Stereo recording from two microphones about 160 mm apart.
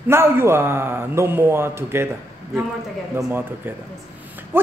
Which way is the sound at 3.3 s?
15° right (ahead or behind).